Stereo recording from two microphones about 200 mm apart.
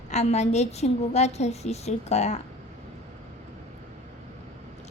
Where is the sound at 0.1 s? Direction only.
35° left (ahead or behind).